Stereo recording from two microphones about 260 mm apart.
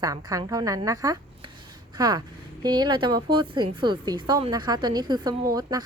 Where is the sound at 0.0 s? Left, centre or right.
Centre.